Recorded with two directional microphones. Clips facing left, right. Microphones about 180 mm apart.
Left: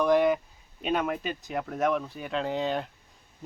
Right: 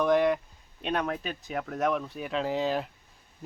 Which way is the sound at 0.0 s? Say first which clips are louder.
Left 1 dB; centre (ahead or behind).